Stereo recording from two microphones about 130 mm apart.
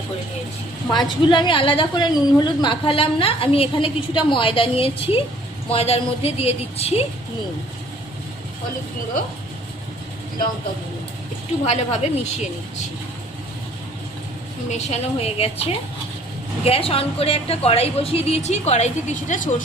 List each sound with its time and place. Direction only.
0.9 s a woman's voice: 35° left (ahead or behind); by 7.0 s 50° left (ahead or behind)
11.6 s a woman's voice: 60° left (ahead or behind)
14.7 s a woman's voice: 55° left (ahead or behind)
16.6 s a woman's voice: 45° left (ahead or behind); by 19.6 s 85° left